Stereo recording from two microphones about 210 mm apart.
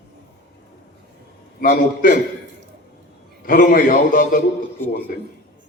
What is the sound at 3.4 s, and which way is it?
A man's voice, 40° left (ahead or behind).